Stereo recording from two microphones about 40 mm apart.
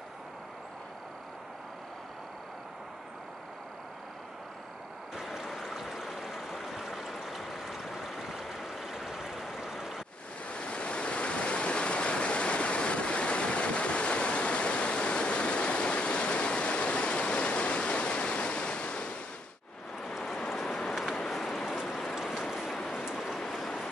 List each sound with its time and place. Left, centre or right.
5.1 s stream: centre
10.5 s waves: left
20.3 s a sound: centre
21.8 s ratchet: centre
22.8 s a sound: centre
23.5 s train: centre